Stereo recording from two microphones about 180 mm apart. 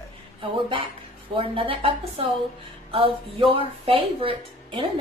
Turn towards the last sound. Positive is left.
turn(degrees=-30)  # may be behind; listen again after turning